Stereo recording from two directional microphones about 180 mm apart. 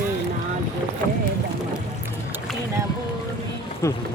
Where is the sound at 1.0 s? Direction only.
15° left (ahead or behind).